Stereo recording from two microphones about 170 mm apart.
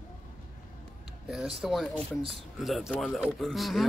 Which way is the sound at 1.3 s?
5° right (ahead or behind).